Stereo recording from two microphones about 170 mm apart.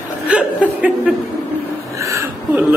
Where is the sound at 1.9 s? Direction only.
15° right (ahead or behind).